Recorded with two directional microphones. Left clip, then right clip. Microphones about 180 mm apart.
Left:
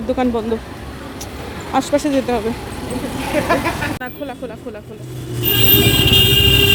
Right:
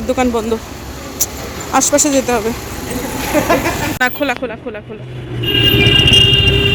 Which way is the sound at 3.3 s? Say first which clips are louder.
Right 4 dB; 45° right (ahead or behind).